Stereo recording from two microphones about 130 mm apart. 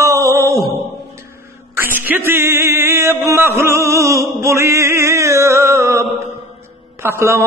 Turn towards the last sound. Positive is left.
turn(degrees=-20)  # may be behind; listen again after turning